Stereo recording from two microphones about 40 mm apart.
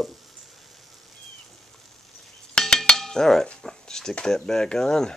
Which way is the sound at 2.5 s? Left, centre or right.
Centre.